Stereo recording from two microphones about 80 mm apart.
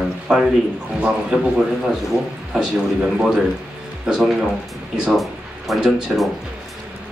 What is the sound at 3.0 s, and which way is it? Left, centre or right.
Speech, centre.